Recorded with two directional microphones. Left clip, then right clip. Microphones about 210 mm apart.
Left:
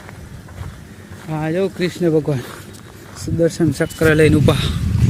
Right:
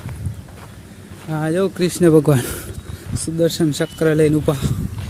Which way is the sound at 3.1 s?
Centre (ahead or behind).